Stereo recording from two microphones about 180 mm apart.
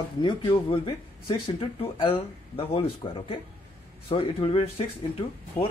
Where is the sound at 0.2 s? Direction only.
25° left (ahead or behind).